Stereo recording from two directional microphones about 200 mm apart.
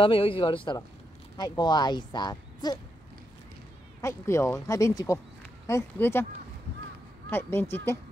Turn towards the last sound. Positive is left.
turn(degrees=10)  # may be behind; listen again after turning